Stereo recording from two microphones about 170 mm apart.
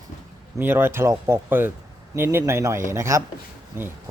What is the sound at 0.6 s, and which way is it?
Speech, 10° right (ahead or behind).